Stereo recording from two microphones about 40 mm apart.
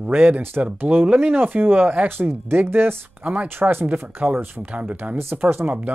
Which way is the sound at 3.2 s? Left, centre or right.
Right.